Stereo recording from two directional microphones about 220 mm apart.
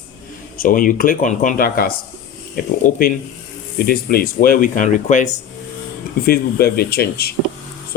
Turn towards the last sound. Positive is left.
turn(degrees=45)  # may be behind; listen again after turning